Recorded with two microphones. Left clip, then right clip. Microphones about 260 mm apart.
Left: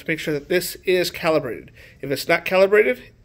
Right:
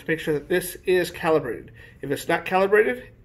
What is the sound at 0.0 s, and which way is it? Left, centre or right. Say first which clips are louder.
Speech: left 1 dB; left.